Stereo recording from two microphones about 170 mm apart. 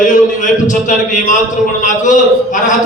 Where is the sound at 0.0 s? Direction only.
45° left (ahead or behind).